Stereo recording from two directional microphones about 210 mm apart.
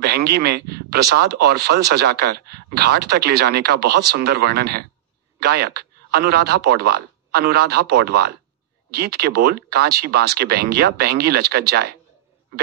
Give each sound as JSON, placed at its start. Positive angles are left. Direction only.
{"t": 0.0, "sound": "speech", "side_deg": -50}